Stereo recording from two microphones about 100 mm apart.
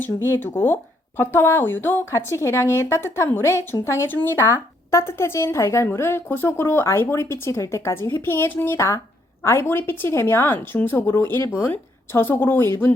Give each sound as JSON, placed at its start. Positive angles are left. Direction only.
{"t": 0.0, "sound": "a woman's voice", "side_deg": 25}